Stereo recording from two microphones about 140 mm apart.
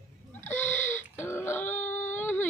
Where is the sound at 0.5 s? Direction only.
20° left (ahead or behind).